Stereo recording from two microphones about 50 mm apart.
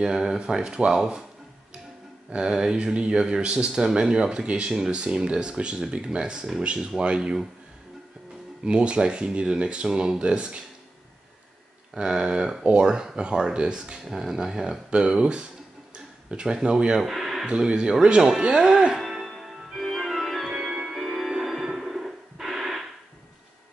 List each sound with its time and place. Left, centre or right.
0.0 s speech: centre
2.3 s speech: centre
8.6 s speech: centre
11.9 s speech: centre
17.0 s a sound: centre
17.5 s speech: centre
18.9 s music: centre
21.6 s a sound: centre